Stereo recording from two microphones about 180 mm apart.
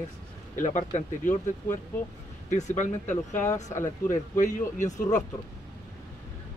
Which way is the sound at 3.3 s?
15° left (ahead or behind).